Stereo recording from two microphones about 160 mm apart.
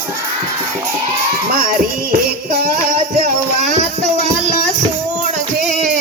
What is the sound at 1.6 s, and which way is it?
Music, 65° right (ahead or behind).